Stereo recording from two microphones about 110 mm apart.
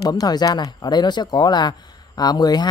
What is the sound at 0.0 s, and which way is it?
Speech, 35° left (ahead or behind).